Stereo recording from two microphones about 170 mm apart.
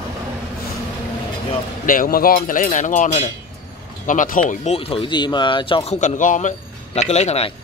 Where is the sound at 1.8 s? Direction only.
55° left (ahead or behind).